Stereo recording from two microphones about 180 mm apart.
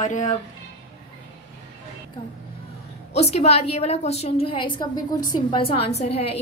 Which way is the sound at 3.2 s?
35° left (ahead or behind).